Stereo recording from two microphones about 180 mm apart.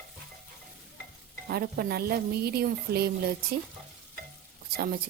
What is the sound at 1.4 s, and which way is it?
Speech, 60° right (ahead or behind).